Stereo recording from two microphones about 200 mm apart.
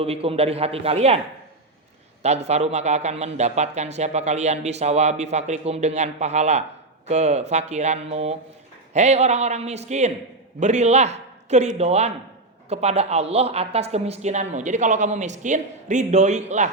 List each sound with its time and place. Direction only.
0.0 s a man's voice: 30° right (ahead or behind)
2.2 s a man's voice: 35° right (ahead or behind)